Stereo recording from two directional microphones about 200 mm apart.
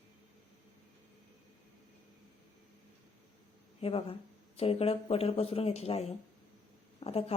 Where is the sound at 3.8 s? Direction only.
30° left (ahead or behind).